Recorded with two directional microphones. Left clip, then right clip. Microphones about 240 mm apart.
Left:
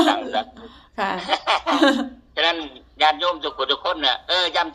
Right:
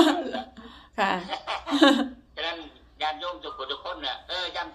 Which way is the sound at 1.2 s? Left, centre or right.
Left.